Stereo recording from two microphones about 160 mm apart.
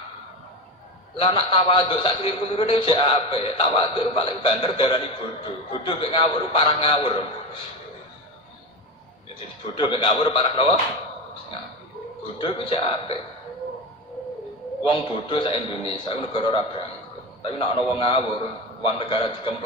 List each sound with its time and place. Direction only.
1.1 s a man's voice: 35° left (ahead or behind)
9.8 s a man's voice: 30° left (ahead or behind)
12.4 s a man's voice: 35° left (ahead or behind)
14.9 s a man's voice: 35° left (ahead or behind)